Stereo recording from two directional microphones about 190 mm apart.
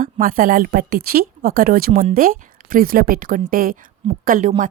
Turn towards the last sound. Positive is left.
turn(degrees=-45)  # may be behind; listen again after turning